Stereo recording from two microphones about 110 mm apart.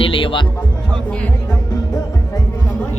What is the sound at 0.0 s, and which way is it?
Music, 55° left (ahead or behind).